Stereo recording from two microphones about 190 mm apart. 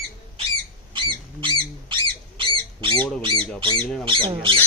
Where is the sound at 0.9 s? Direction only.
25° right (ahead or behind).